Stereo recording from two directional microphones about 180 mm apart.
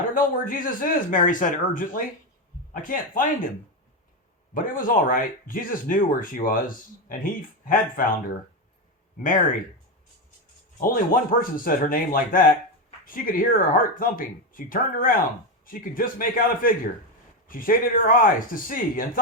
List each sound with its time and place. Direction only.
0.1 s speech: 50° left (ahead or behind)
4.5 s speech: 50° left (ahead or behind)
9.2 s speech: 45° left (ahead or behind)
10.8 s speech: 50° left (ahead or behind)